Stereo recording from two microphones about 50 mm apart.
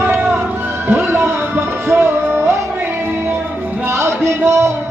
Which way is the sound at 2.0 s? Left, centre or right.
Right.